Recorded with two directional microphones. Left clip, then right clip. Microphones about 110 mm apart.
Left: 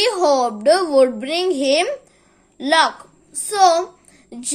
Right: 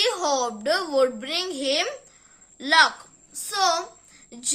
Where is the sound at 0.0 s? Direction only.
40° left (ahead or behind).